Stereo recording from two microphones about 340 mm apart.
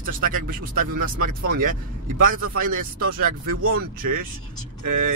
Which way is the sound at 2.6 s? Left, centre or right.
Right.